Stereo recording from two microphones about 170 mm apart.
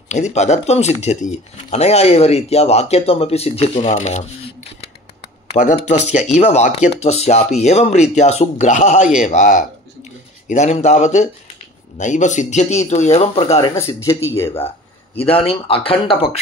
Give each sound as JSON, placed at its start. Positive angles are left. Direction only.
{"t": 0.1, "sound": "speech", "side_deg": 40}
{"t": 5.5, "sound": "speech", "side_deg": 40}
{"t": 13.6, "sound": "speech", "side_deg": 15}
{"t": 15.1, "sound": "speech", "side_deg": 35}